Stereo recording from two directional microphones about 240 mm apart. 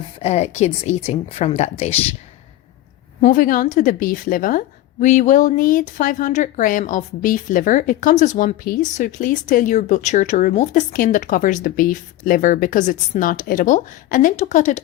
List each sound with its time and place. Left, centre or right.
0.2 s a woman's voice: left
3.2 s a woman's voice: left